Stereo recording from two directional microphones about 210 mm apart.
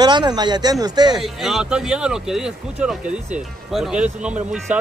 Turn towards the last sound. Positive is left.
turn(degrees=-5)  # may be behind; listen again after turning